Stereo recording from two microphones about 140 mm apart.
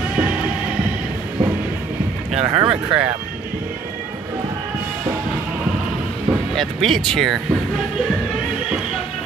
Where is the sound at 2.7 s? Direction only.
10° right (ahead or behind).